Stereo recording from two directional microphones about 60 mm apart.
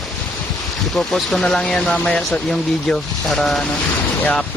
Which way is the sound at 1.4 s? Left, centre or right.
Centre.